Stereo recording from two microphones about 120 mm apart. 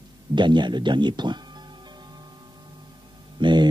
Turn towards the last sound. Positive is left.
turn(degrees=-40)  # may be behind; listen again after turning